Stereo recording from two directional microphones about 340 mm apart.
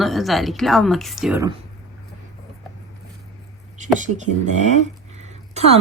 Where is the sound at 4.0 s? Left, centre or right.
Right.